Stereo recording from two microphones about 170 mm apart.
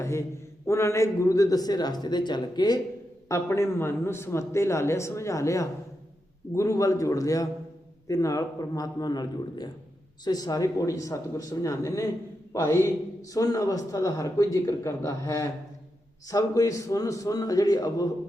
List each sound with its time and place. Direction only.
0.0 s a man's voice: 15° left (ahead or behind)